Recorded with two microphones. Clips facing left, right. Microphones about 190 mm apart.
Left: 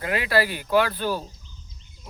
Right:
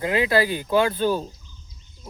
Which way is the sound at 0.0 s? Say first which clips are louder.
Right 3 dB; 25° right (ahead or behind).